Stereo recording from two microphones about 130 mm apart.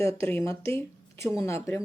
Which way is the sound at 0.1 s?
45° right (ahead or behind).